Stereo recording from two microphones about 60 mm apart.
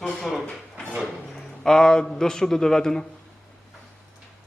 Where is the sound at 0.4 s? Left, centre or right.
Centre.